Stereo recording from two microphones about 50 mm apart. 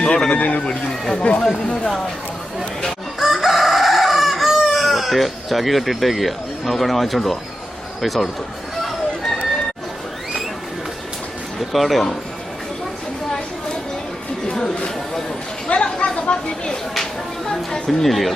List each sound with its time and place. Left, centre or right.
0.3 s speech: left
1.4 s speech: centre
3.2 s chicken: centre
8.0 s speech: centre
8.8 s a sound: centre
11.7 s speech: centre
14.5 s a sound: centre
15.7 s chatter: left
16.9 s a sound: centre
18.0 s speech: centre